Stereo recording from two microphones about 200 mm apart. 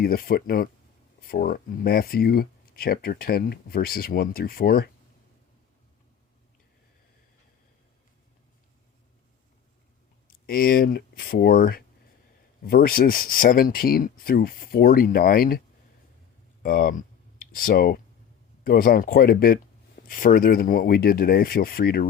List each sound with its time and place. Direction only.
0.0 s speech: 50° left (ahead or behind)
10.4 s speech: 50° left (ahead or behind)
16.6 s speech: 45° left (ahead or behind)